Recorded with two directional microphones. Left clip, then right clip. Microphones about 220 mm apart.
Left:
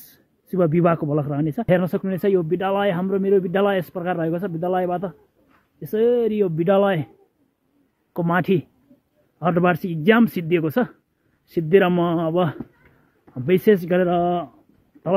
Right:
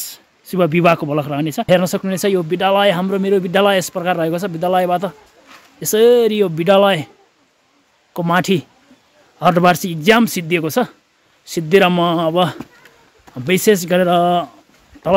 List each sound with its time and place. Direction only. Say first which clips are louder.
0.5 s speech: right 5 dB; 10° right (ahead or behind)
8.1 s speech: right 5 dB; 15° right (ahead or behind)